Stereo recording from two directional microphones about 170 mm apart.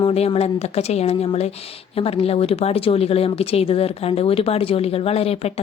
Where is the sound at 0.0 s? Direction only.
35° left (ahead or behind).